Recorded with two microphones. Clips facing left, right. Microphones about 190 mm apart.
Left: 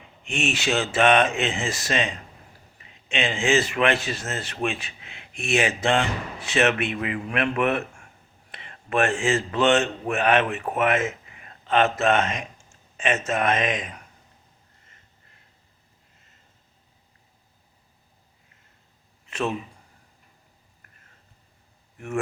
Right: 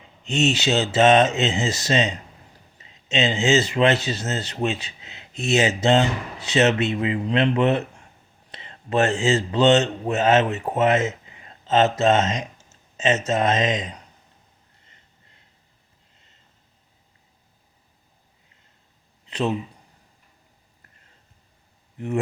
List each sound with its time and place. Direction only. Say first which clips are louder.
0.0 s speech: right 6 dB; 20° right (ahead or behind)
21.9 s speech: right 3 dB; 20° right (ahead or behind)